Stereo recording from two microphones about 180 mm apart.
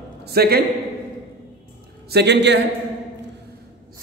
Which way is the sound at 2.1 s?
70° right (ahead or behind).